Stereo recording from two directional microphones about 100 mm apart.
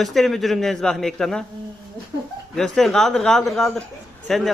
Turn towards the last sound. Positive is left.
turn(degrees=0)  # may be behind; listen again after turning